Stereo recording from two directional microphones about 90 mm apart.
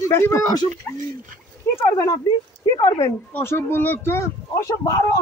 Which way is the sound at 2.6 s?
50° left (ahead or behind).